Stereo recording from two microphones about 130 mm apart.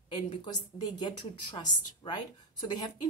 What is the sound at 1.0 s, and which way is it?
A woman's voice, 35° left (ahead or behind).